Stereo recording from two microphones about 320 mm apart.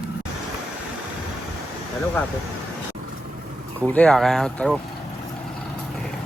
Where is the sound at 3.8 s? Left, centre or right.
Centre.